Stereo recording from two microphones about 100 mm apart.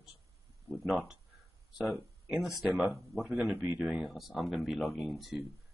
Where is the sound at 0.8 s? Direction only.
10° right (ahead or behind).